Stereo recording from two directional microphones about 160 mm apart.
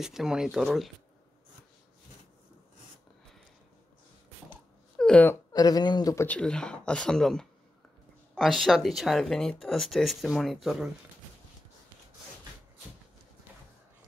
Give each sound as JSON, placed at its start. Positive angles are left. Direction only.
{"t": 0.0, "sound": "speech", "side_deg": -5}
{"t": 4.9, "sound": "a sound", "side_deg": 5}
{"t": 5.5, "sound": "speech", "side_deg": 25}
{"t": 6.2, "sound": "speech", "side_deg": 5}